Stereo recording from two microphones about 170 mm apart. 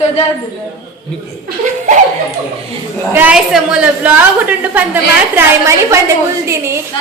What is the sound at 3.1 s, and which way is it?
A woman's voice, 5° right (ahead or behind).